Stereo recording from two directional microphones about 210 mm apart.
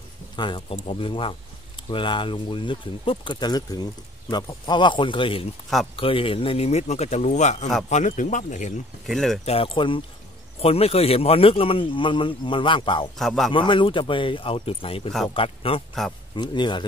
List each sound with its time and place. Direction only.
0.4 s speech: 20° left (ahead or behind)
9.0 s speech: centre (ahead or behind)
9.4 s speech: 25° left (ahead or behind)
13.2 s speech: centre (ahead or behind)
13.5 s speech: 25° left (ahead or behind)